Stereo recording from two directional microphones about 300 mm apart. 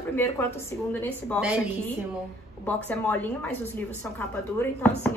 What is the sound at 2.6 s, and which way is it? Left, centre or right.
Speech, centre.